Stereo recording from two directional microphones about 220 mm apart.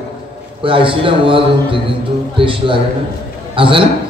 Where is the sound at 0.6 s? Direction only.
25° right (ahead or behind).